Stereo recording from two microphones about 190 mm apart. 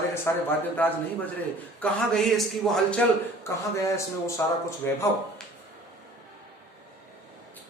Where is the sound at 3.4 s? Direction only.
15° left (ahead or behind).